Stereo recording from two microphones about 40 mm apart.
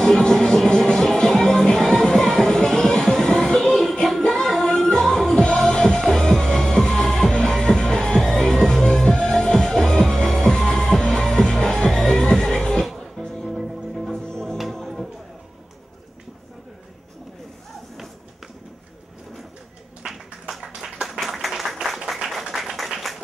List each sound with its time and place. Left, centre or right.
0.3 s music: centre
5.3 s music: left
12.8 s music: centre
14.1 s music: centre
20.0 s a sound: centre
21.2 s applause: centre
22.6 s a sound: centre